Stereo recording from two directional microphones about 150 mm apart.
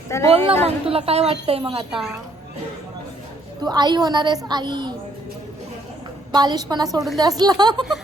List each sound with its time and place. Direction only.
0.3 s a woman's voice: 40° right (ahead or behind)
1.9 s a woman's voice: 5° right (ahead or behind)
3.6 s a woman's voice: 30° right (ahead or behind)
6.3 s a woman's voice: 25° right (ahead or behind)